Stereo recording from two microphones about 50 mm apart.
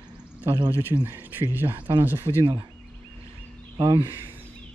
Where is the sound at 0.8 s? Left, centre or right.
Right.